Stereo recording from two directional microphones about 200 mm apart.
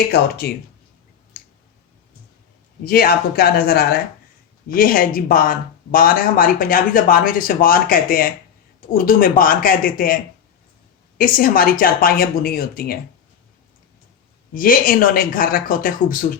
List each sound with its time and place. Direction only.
0.1 s speech: 50° left (ahead or behind)
2.8 s speech: 50° left (ahead or behind)
11.2 s speech: 45° left (ahead or behind)
14.5 s speech: 45° left (ahead or behind)